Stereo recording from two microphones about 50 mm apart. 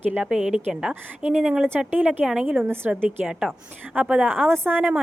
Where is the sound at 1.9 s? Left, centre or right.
Right.